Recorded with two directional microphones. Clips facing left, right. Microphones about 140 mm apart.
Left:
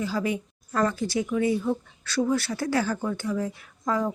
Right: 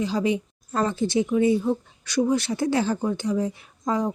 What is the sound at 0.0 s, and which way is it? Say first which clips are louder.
Speech: right 4 dB; 20° right (ahead or behind).